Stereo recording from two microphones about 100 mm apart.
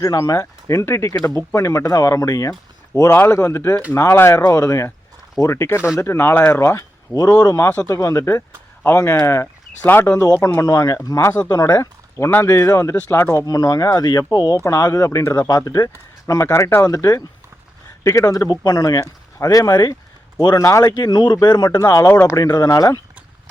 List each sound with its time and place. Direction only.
0.0 s speech: 40° left (ahead or behind)
20.6 s speech: 30° left (ahead or behind)
20.9 s speech: 45° left (ahead or behind)